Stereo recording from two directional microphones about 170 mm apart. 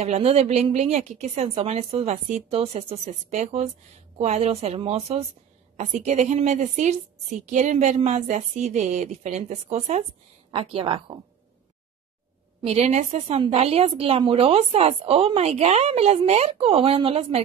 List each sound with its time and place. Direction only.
0.0 s a woman's voice: 40° right (ahead or behind)
12.6 s a woman's voice: 40° right (ahead or behind)